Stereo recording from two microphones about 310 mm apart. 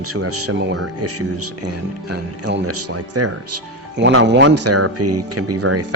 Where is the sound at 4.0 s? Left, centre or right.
Right.